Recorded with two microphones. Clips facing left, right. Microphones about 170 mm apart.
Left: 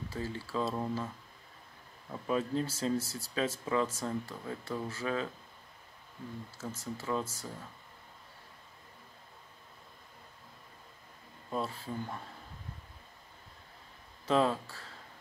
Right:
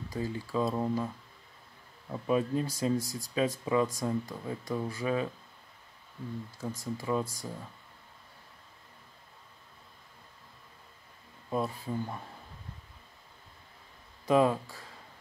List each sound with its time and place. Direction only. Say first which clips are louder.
0.1 s speech: right 5 dB; 15° right (ahead or behind)
2.2 s speech: right 3 dB; 10° right (ahead or behind)
6.6 s speech: right 3 dB; 15° right (ahead or behind)
11.5 s speech: right 4 dB; 15° right (ahead or behind)
14.2 s speech: right 4 dB; 15° right (ahead or behind)